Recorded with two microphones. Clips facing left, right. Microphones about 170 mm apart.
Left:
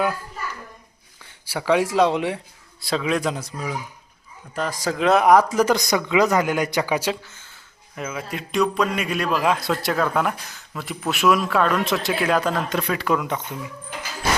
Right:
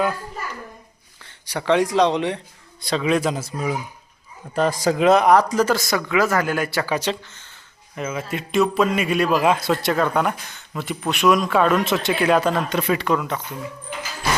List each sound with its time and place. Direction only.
1.2 s speech: 5° left (ahead or behind)
4.5 s speech: 25° right (ahead or behind)
4.9 s speech: centre (ahead or behind)
5.2 s speech: 10° left (ahead or behind)